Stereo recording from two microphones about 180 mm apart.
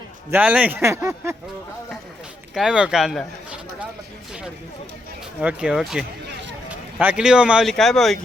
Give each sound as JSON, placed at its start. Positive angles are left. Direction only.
{"t": 0.3, "sound": "speech", "side_deg": -10}
{"t": 2.6, "sound": "speech", "side_deg": -5}
{"t": 5.4, "sound": "speech", "side_deg": -5}
{"t": 6.2, "sound": "a sound", "side_deg": -70}
{"t": 7.0, "sound": "speech", "side_deg": -5}